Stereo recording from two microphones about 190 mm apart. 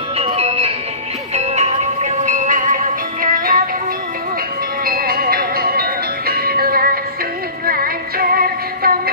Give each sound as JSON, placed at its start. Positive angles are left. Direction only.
{"t": 0.2, "sound": "music", "side_deg": -35}
{"t": 4.8, "sound": "music", "side_deg": -50}